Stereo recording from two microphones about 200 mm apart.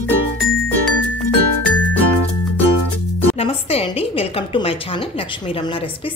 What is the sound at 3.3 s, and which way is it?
A woman's voice, 30° left (ahead or behind).